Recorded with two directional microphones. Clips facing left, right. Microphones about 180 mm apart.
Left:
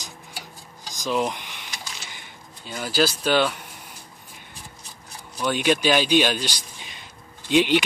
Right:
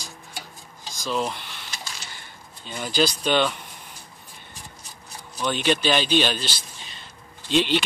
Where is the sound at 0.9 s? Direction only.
15° left (ahead or behind).